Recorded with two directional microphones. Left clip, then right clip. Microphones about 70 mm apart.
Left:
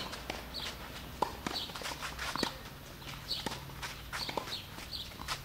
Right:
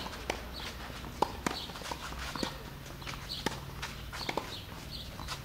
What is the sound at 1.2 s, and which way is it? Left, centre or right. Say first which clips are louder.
Clip-clop: right 3 dB; centre.